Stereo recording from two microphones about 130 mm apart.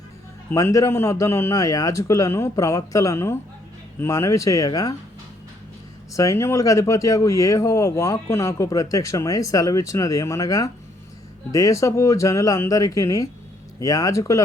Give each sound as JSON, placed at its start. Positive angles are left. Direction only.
{"t": 0.5, "sound": "speech", "side_deg": 25}
{"t": 6.1, "sound": "speech", "side_deg": 25}